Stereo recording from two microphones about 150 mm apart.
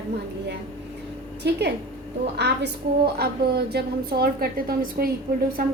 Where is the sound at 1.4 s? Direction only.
90° right.